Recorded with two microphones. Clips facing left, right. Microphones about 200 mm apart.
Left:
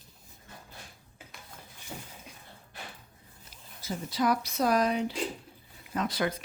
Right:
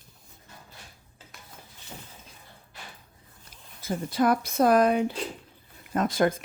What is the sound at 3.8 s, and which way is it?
Speech, 55° right (ahead or behind).